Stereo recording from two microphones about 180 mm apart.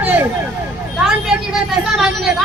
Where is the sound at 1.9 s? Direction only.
Centre (ahead or behind).